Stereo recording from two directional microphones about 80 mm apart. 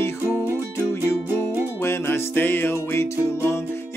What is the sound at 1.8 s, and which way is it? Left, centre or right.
Music, left.